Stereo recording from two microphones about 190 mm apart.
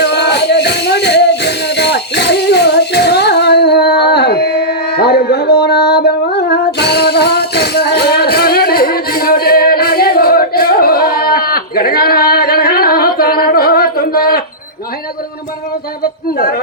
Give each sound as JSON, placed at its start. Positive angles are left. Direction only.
{"t": 0.0, "sound": "music", "side_deg": 60}